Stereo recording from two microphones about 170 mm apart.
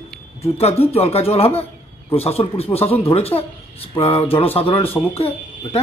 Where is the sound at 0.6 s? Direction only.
35° left (ahead or behind).